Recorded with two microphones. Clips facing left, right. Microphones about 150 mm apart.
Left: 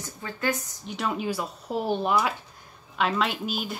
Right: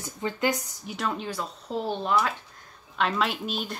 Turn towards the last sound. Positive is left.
turn(degrees=0)  # may be behind; listen again after turning